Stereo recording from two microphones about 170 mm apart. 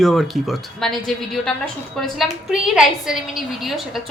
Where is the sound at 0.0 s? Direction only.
Centre (ahead or behind).